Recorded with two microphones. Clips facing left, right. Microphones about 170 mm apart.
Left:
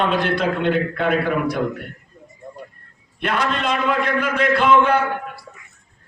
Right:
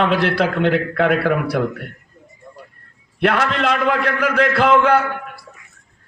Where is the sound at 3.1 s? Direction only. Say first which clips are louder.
Right 4 dB; 75° right (ahead or behind).